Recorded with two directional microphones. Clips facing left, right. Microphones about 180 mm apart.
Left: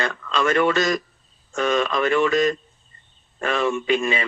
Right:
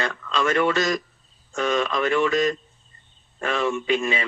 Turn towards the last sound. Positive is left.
turn(degrees=60)  # may be behind; listen again after turning